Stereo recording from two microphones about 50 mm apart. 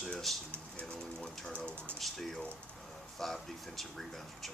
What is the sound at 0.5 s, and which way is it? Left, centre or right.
Speech, left.